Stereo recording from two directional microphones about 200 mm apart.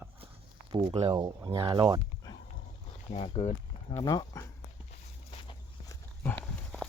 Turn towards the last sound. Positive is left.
turn(degrees=5)  # may be behind; listen again after turning